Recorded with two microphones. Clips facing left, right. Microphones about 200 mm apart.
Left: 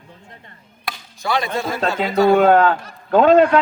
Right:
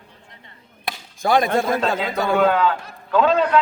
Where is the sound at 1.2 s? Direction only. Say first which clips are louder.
Right 4 dB; 50° right (ahead or behind).